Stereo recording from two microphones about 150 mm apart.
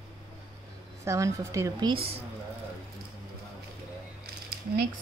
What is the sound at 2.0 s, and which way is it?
Speech, 40° right (ahead or behind).